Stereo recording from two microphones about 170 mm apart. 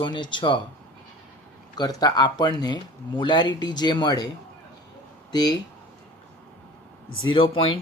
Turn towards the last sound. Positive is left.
turn(degrees=30)  # may be behind; listen again after turning